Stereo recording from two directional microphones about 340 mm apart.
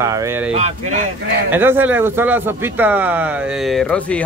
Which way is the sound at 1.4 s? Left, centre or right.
Centre.